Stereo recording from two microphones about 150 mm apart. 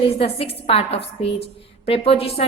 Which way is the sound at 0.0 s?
40° left (ahead or behind).